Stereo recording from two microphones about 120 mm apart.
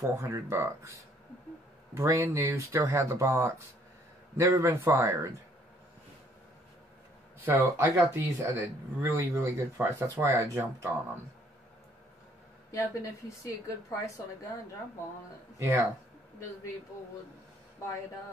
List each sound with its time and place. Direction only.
0.0 s speech: 25° right (ahead or behind)
2.0 s speech: 20° right (ahead or behind)
7.4 s speech: 15° right (ahead or behind)
12.7 s a woman's voice: 25° left (ahead or behind)
15.6 s speech: 25° right (ahead or behind)